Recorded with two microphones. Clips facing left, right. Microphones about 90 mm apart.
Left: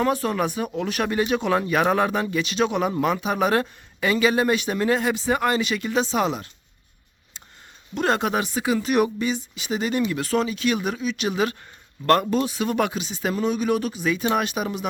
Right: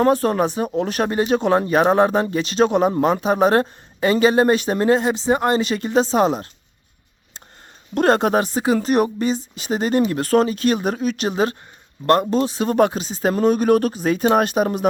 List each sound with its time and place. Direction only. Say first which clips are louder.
0.0 s speech: right 6 dB; 40° right (ahead or behind)
7.9 s speech: right 6 dB; 45° right (ahead or behind)
12.0 s speech: right 2 dB; 25° right (ahead or behind)
12.4 s speech: right 6 dB; 35° right (ahead or behind)